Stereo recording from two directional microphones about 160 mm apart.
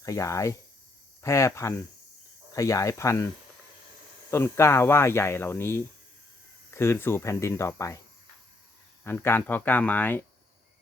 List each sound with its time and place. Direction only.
0.0 s speech: 20° left (ahead or behind)
4.3 s speech: 15° left (ahead or behind)
9.0 s speech: 15° left (ahead or behind)